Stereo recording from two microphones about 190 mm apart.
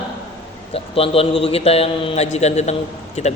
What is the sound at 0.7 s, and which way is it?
A man's voice, 30° left (ahead or behind).